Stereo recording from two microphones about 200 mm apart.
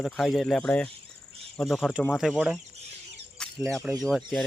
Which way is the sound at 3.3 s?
Centre (ahead or behind).